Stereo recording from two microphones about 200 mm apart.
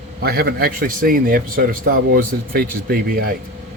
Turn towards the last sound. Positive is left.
turn(degrees=-50)  # may be behind; listen again after turning